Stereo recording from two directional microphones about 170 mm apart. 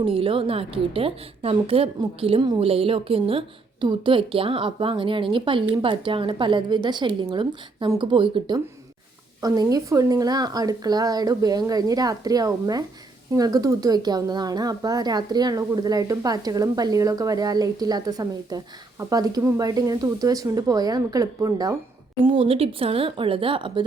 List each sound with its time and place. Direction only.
0.0 s a woman's voice: 30° right (ahead or behind)
22.2 s a woman's voice: 30° right (ahead or behind)